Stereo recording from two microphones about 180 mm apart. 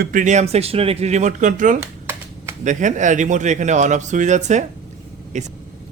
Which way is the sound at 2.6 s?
45° right (ahead or behind).